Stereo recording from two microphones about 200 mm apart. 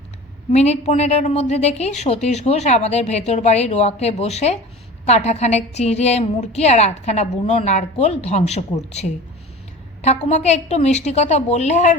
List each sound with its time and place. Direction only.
0.5 s a woman's voice: 35° left (ahead or behind)